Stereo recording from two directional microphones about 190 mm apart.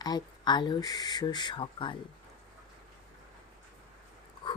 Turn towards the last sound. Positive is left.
turn(degrees=25)  # may be behind; listen again after turning